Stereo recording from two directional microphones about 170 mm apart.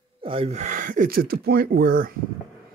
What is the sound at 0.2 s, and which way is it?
Speech, 35° right (ahead or behind).